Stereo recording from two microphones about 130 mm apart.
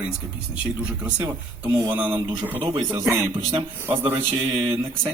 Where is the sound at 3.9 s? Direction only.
40° right (ahead or behind).